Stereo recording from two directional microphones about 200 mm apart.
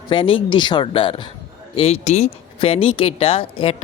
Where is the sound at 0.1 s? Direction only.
25° left (ahead or behind).